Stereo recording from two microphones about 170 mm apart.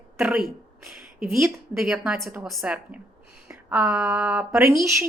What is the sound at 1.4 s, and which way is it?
A woman's voice, centre (ahead or behind).